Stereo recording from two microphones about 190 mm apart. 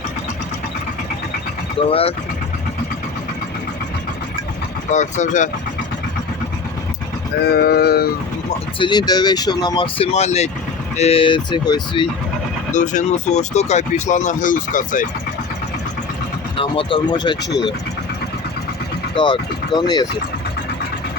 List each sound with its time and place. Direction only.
1.9 s speech: 30° left (ahead or behind)
4.9 s speech: 40° left (ahead or behind)
7.4 s a sound: 55° left (ahead or behind)
8.8 s speech: 20° left (ahead or behind)
12.7 s speech: 40° left (ahead or behind)
16.6 s speech: 25° left (ahead or behind)
19.1 s speech: 25° left (ahead or behind)